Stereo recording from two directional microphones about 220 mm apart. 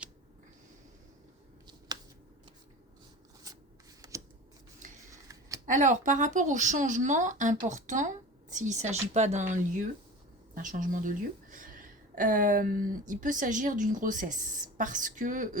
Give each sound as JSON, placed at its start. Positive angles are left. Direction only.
{"t": 3.5, "sound": "shuffling cards", "side_deg": -15}
{"t": 4.0, "sound": "scissors", "side_deg": -20}
{"t": 4.8, "sound": "cutlery", "side_deg": -35}
{"t": 5.1, "sound": "a sound", "side_deg": -15}
{"t": 5.6, "sound": "a woman's voice", "side_deg": -35}